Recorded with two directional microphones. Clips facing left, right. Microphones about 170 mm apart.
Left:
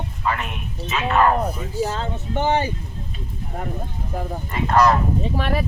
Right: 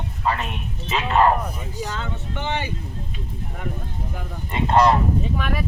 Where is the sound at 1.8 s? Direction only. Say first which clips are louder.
Left 4 dB; 35° left (ahead or behind).